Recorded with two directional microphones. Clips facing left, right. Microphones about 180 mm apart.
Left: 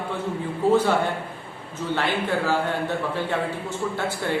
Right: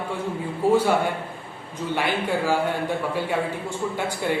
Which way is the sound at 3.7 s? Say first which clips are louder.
Even; 15° right (ahead or behind).